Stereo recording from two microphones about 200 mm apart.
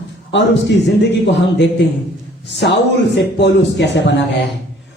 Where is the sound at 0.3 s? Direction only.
60° left (ahead or behind).